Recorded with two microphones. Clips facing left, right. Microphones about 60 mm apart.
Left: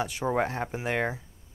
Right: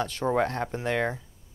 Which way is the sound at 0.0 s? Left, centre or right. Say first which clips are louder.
Right 2 dB; centre.